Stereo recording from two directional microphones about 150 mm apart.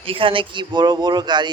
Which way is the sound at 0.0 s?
35° right (ahead or behind).